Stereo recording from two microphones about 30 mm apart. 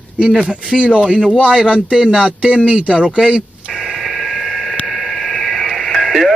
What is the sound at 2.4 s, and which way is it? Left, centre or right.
Speech, right.